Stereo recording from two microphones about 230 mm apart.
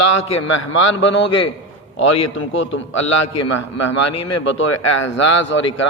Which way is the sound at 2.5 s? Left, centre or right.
Left.